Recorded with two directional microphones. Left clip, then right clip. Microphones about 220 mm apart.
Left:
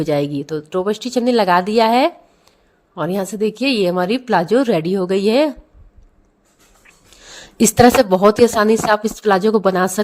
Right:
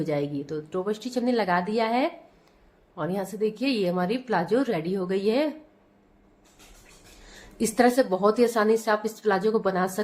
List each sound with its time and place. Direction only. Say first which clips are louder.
0.0 s a woman's voice: left 9 dB; 40° left (ahead or behind)
7.3 s a woman's voice: left 12 dB; 40° left (ahead or behind)